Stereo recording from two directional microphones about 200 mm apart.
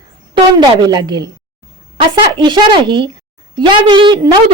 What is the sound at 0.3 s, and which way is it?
A woman's voice, 20° right (ahead or behind).